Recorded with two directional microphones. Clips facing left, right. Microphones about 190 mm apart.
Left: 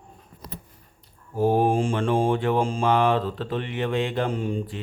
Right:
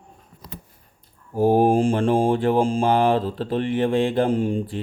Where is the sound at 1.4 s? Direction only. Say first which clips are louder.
Right 4 dB; 35° right (ahead or behind).